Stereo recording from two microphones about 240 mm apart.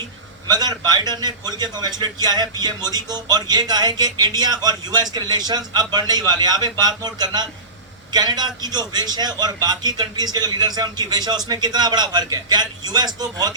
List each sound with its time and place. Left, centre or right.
0.4 s a man's voice: centre